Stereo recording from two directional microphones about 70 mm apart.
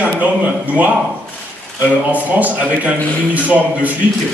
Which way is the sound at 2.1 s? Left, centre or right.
Right.